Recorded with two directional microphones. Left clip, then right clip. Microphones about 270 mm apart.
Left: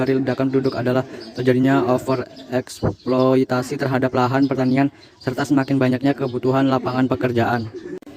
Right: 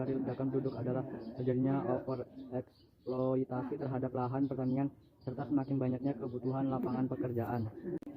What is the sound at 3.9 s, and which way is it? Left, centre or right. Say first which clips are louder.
A man's voice: left 19 dB; left.